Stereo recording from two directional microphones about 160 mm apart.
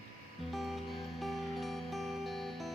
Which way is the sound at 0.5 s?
Centre (ahead or behind).